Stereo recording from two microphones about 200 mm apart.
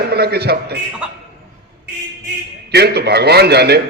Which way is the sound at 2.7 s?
55° right (ahead or behind).